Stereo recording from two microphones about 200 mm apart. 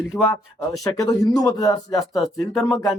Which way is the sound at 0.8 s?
15° left (ahead or behind).